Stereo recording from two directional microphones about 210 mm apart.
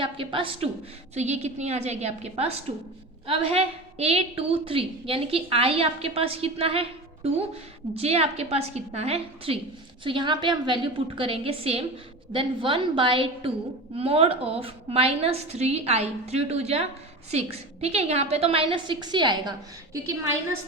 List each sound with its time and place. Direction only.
0.0 s a woman's voice: 25° right (ahead or behind)
7.9 s a woman's voice: 30° right (ahead or behind); by 20.6 s 15° right (ahead or behind)